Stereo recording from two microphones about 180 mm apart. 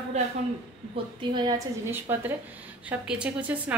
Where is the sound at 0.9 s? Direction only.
25° right (ahead or behind).